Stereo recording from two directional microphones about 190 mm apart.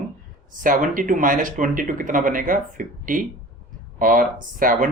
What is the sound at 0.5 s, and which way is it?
Speech, 45° right (ahead or behind).